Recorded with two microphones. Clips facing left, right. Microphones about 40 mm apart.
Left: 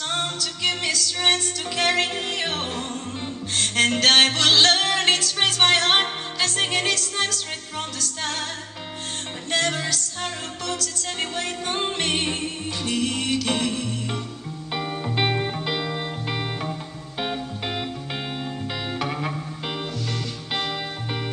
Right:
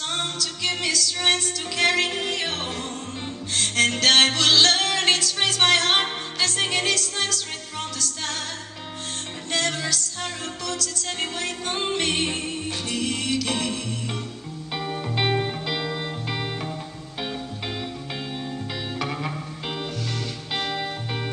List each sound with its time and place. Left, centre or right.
0.1 s music: centre
9.5 s music: centre
17.2 s music: left
18.9 s music: centre